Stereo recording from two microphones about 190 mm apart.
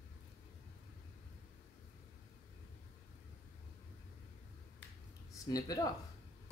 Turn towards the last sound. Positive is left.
turn(degrees=20)  # may be behind; listen again after turning